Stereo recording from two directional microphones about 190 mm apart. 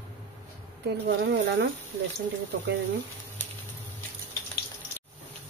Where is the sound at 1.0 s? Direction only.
65° right (ahead or behind).